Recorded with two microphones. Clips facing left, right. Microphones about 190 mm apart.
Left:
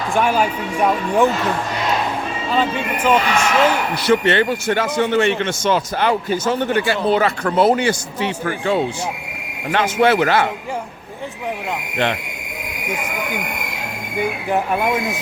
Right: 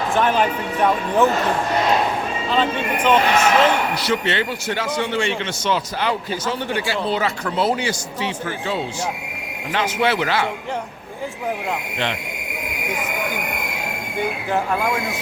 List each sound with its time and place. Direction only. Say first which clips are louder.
0.1 s speech: left 2 dB; 10° left (ahead or behind)
2.6 s speech: left 1 dB; 10° left (ahead or behind)
4.0 s a man's voice: left 6 dB; 55° left (ahead or behind)
14.2 s speech: left 2 dB; 15° left (ahead or behind)